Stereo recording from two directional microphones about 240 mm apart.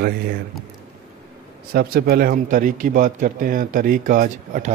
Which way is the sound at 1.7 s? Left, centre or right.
Right.